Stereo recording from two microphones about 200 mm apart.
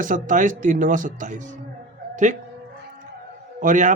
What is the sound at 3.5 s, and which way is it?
Speech, 40° right (ahead or behind).